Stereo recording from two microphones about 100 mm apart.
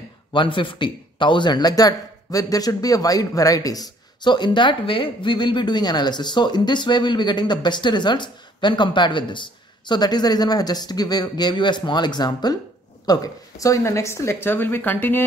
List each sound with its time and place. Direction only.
0.3 s a man's voice: 55° left (ahead or behind); by 15.2 s 20° left (ahead or behind)